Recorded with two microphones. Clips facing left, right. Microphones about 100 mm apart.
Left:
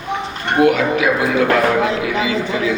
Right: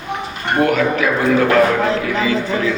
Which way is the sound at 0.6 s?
45° right (ahead or behind).